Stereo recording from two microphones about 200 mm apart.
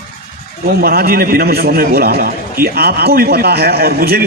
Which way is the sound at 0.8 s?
50° right (ahead or behind).